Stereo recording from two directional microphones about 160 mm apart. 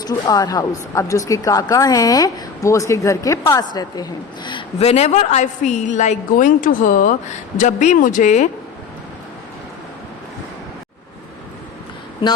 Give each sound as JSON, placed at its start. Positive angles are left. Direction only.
{"t": 0.0, "sound": "speech", "side_deg": 25}
{"t": 4.8, "sound": "a woman's voice", "side_deg": 40}